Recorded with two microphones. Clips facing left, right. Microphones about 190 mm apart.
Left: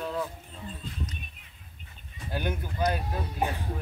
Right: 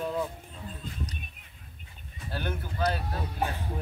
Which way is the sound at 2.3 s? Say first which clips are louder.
Left 2 dB; 15° left (ahead or behind).